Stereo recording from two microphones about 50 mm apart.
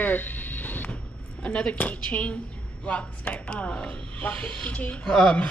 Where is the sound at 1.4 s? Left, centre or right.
Left.